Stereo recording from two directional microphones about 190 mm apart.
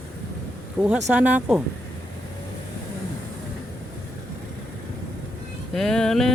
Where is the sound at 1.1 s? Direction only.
10° right (ahead or behind).